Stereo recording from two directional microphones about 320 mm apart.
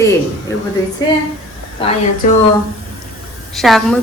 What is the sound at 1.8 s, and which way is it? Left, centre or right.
Speech, centre.